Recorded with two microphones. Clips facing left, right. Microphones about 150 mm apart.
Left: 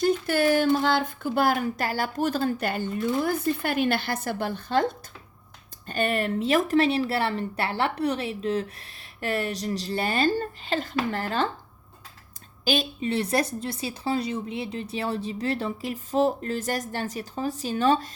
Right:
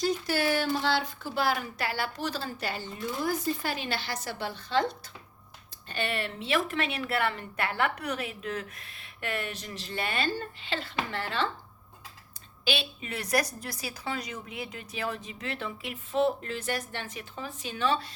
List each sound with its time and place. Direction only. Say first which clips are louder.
0.0 s speech: left 6 dB; 55° left (ahead or behind)
12.6 s speech: left 7 dB; 40° left (ahead or behind)